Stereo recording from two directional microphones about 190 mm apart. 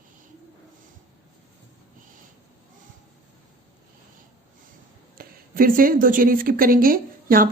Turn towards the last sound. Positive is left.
turn(degrees=-50)  # may be behind; listen again after turning